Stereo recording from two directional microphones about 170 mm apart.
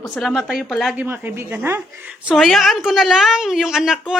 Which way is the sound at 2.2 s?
Centre (ahead or behind).